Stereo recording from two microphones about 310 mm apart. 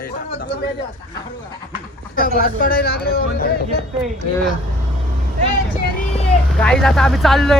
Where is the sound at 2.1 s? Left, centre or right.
Left.